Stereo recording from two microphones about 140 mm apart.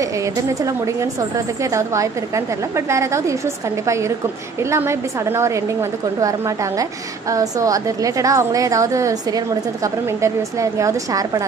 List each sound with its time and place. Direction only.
1.6 s a woman's voice: 20° right (ahead or behind)
4.6 s a woman's voice: 20° right (ahead or behind)
6.8 s a woman's voice: 25° right (ahead or behind)
10.2 s a woman's voice: 20° right (ahead or behind)